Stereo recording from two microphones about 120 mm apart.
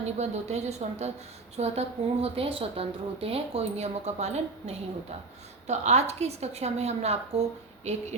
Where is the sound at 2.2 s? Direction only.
50° right (ahead or behind).